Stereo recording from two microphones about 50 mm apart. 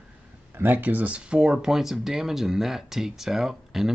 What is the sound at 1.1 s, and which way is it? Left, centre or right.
Speech, centre.